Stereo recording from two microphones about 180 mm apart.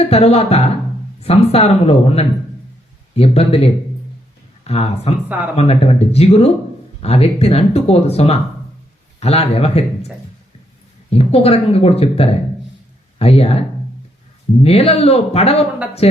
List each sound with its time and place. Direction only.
0.0 s speech: 35° left (ahead or behind)
11.1 s speech: 35° left (ahead or behind)
14.6 s speech: 35° left (ahead or behind)